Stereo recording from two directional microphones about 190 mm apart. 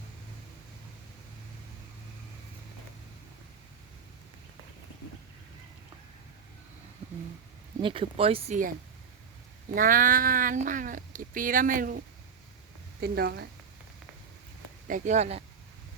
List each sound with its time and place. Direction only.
7.8 s speech: 25° right (ahead or behind)
9.7 s speech: 45° right (ahead or behind)
13.0 s speech: 60° right (ahead or behind)
14.8 s speech: 40° right (ahead or behind)